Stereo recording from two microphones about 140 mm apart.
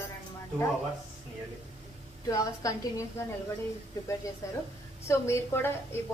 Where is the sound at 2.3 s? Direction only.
25° left (ahead or behind).